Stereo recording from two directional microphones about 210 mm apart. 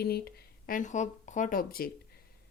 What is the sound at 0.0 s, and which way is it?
Speech, 50° left (ahead or behind).